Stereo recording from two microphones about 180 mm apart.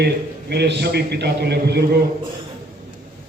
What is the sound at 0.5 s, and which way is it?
A man's voice, 65° right (ahead or behind).